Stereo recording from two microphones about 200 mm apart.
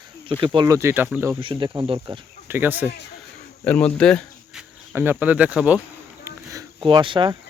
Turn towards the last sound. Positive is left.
turn(degrees=-25)  # may be behind; listen again after turning